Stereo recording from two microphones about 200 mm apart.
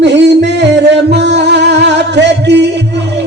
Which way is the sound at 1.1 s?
60° right (ahead or behind).